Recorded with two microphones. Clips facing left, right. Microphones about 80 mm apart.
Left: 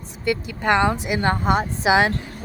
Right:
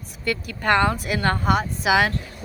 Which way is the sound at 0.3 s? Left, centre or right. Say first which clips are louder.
Left 1 dB; centre.